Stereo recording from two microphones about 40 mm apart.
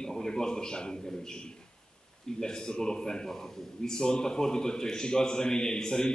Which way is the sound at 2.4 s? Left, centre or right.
Centre.